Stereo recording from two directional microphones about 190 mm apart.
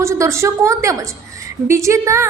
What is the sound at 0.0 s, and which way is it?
A woman's voice, 15° right (ahead or behind).